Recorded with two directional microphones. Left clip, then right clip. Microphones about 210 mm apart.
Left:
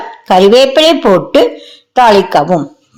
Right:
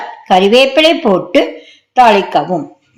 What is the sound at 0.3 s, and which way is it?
Speech, 35° left (ahead or behind).